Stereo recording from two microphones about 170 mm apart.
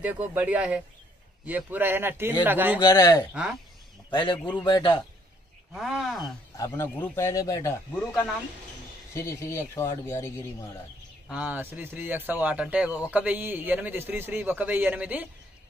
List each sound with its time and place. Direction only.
0.0 s speech: 10° right (ahead or behind)
2.8 s a man's voice: 25° left (ahead or behind)
5.7 s speech: centre (ahead or behind)
6.5 s speech: 15° left (ahead or behind)
9.1 s speech: 15° left (ahead or behind)
11.2 s speech: 5° right (ahead or behind)